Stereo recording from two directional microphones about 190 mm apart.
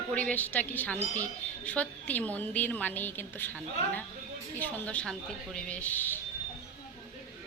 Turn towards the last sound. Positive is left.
turn(degrees=10)  # may be behind; listen again after turning